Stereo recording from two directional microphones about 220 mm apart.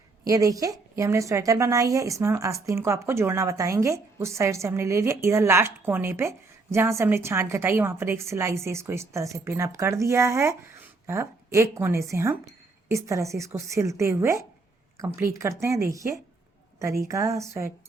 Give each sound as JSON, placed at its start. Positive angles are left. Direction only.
{"t": 0.3, "sound": "a woman's voice", "side_deg": -15}